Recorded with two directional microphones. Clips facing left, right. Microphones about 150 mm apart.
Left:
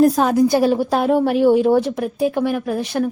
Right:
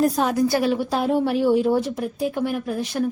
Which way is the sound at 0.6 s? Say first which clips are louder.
Left 5 dB; 40° left (ahead or behind).